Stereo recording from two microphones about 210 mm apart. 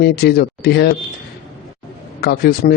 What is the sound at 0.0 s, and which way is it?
Speech, 50° left (ahead or behind).